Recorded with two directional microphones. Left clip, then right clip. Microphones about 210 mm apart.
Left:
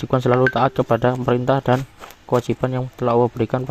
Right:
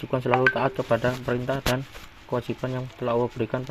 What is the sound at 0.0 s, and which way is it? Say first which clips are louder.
Speech: left 5 dB; 55° left (ahead or behind).